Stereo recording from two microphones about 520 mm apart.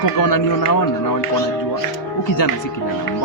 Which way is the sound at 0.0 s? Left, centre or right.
Left.